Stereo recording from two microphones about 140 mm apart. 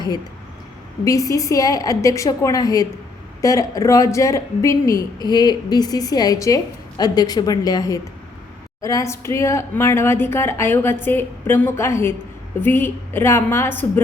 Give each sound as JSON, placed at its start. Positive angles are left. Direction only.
{"t": 1.0, "sound": "a woman's voice", "side_deg": 25}